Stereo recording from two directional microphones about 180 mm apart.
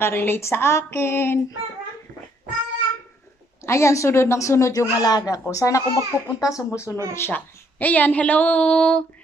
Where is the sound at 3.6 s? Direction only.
15° left (ahead or behind).